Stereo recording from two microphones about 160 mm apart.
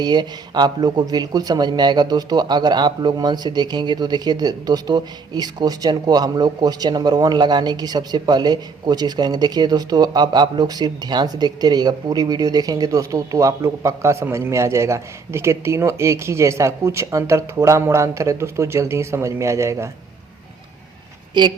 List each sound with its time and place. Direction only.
0.0 s speech: 25° right (ahead or behind)
21.4 s speech: 30° right (ahead or behind)